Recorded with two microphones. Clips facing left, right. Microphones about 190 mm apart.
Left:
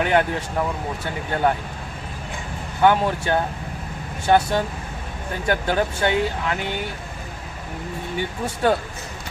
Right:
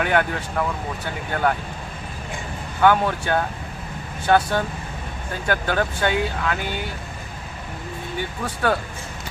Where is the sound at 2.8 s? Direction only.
20° left (ahead or behind).